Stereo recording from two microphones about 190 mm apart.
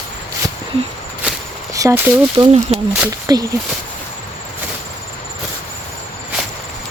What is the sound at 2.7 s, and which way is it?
Speech, 30° right (ahead or behind).